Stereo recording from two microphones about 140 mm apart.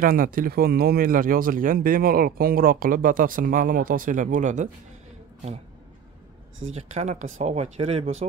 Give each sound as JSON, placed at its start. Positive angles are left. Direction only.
{"t": 0.0, "sound": "speech", "side_deg": -90}
{"t": 6.7, "sound": "speech", "side_deg": -55}